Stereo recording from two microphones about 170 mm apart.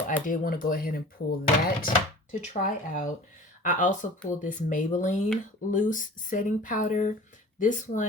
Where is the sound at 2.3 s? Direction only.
50° left (ahead or behind).